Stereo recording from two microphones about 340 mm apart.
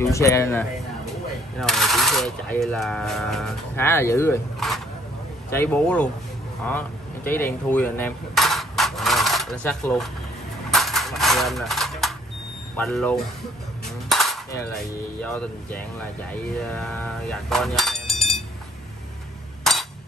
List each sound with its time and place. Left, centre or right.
0.0 s speech: centre
7.2 s speech: centre
10.7 s a sound: centre
12.7 s speech: centre
14.0 s cutlery: centre
15.2 s speech: centre
19.6 s chink: centre